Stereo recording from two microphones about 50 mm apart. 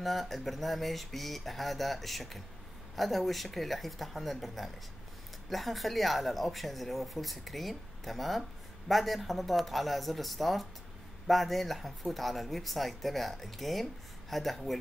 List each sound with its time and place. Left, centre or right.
0.0 s speech: centre